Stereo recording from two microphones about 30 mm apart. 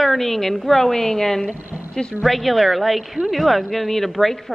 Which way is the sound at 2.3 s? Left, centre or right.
Centre.